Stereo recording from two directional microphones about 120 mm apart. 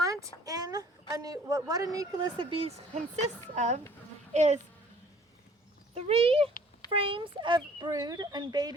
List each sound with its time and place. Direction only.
0.0 s a woman's voice: 30° right (ahead or behind); by 3.0 s 55° right (ahead or behind)
3.5 s a woman's voice: 70° right (ahead or behind)
5.9 s a child's voice: 55° right (ahead or behind); by 7.9 s 40° right (ahead or behind)
7.9 s speech: 30° right (ahead or behind)